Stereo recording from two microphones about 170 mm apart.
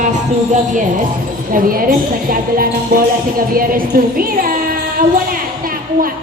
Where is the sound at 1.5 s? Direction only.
55° right (ahead or behind).